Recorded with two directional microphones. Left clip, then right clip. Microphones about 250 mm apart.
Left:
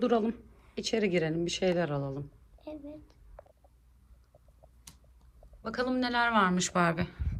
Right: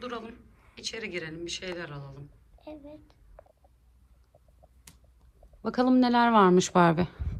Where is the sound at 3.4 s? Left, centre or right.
Left.